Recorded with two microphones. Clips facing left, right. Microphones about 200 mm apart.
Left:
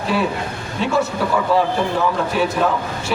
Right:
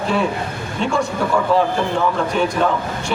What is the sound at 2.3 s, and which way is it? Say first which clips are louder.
Speech: even; 5° left (ahead or behind).